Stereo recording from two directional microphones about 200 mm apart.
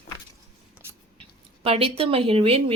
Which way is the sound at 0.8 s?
10° right (ahead or behind).